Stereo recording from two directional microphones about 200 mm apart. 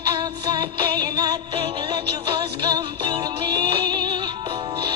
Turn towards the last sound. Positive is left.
turn(degrees=-20)  # may be behind; listen again after turning